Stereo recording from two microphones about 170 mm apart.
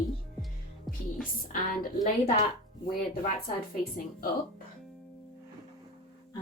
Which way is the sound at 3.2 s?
60° left (ahead or behind).